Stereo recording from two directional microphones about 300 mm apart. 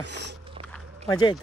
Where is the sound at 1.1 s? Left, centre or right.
Centre.